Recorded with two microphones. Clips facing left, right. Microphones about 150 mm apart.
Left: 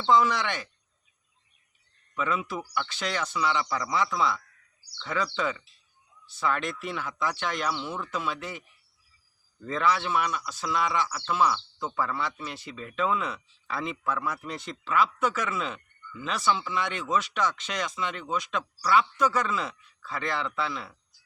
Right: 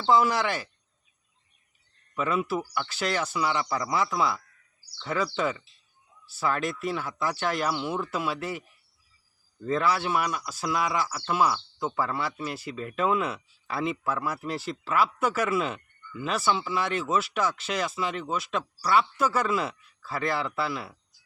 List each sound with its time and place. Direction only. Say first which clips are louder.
0.0 s speech: right 1 dB; 5° right (ahead or behind)
2.2 s speech: right 3 dB; 5° right (ahead or behind)
9.6 s speech: right 1 dB; 5° right (ahead or behind)
12.7 s speech: right 5 dB; 50° right (ahead or behind)
13.0 s speech: right 2 dB; 10° right (ahead or behind)